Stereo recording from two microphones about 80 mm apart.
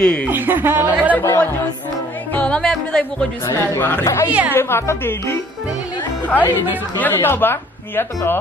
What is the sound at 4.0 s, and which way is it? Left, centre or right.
Speech, left.